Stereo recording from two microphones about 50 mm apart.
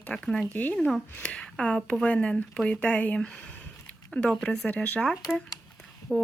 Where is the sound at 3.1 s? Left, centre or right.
Centre.